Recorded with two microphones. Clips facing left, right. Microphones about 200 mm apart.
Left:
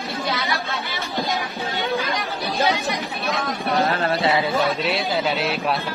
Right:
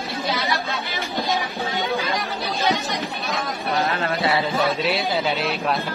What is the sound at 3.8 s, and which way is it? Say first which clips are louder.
Speech: left 2 dB; 35° left (ahead or behind).